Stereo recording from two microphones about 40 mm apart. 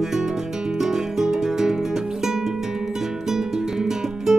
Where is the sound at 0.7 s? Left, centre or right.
Centre.